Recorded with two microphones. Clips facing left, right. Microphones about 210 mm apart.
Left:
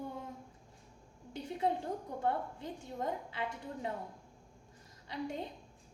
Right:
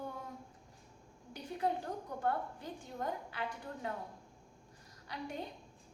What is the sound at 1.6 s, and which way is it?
A woman's voice, 25° left (ahead or behind).